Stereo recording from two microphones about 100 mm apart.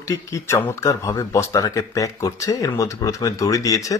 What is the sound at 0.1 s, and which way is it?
A man's voice, 30° left (ahead or behind).